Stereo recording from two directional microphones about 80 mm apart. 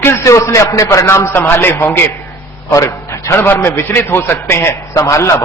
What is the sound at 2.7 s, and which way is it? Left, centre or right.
A man's voice, left.